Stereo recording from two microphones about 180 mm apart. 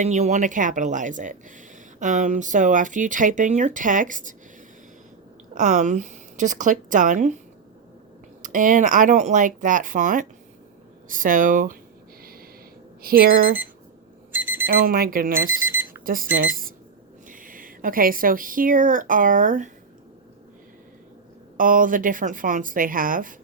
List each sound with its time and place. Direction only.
0.0 s speech: 40° right (ahead or behind)
5.5 s speech: 45° right (ahead or behind)
8.4 s speech: 45° right (ahead or behind)
13.0 s speech: 55° right (ahead or behind)
14.3 s alarm clock: 10° right (ahead or behind)
14.7 s speech: 55° right (ahead or behind)
15.7 s alarm clock: 15° right (ahead or behind)
16.0 s speech: 50° right (ahead or behind)
21.6 s speech: 50° right (ahead or behind)